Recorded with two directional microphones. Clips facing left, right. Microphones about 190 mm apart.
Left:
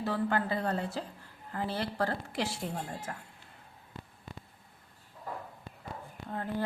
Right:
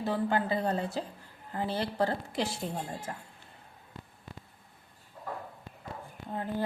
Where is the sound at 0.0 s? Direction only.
20° right (ahead or behind).